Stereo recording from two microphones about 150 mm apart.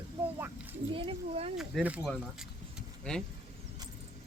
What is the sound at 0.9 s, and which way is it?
Speech, 35° right (ahead or behind).